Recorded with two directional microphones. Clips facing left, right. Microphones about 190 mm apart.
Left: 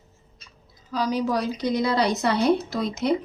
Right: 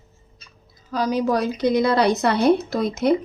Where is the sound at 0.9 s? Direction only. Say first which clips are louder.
Right 3 dB; 50° right (ahead or behind).